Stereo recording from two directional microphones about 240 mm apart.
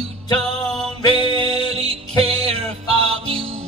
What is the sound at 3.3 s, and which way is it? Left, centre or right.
Music, right.